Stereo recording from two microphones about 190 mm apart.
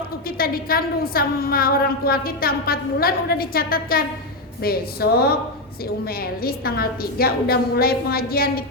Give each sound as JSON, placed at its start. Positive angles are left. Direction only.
{"t": 0.3, "sound": "a woman's voice", "side_deg": 50}
{"t": 6.1, "sound": "a woman's voice", "side_deg": 50}